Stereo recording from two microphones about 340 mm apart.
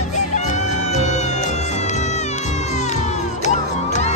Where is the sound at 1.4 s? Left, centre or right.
Centre.